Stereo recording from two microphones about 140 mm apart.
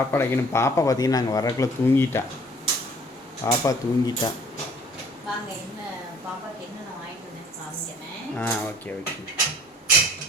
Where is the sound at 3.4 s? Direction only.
25° left (ahead or behind).